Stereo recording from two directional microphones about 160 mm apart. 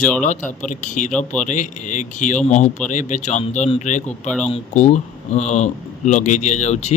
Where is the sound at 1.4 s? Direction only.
50° left (ahead or behind).